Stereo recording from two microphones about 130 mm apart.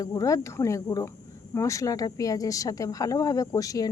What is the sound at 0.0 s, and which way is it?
A woman's voice, 25° left (ahead or behind).